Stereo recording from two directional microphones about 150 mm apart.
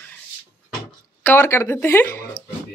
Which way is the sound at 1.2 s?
15° left (ahead or behind).